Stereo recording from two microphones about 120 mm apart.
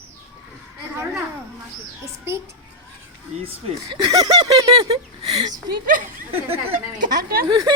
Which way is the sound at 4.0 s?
30° right (ahead or behind).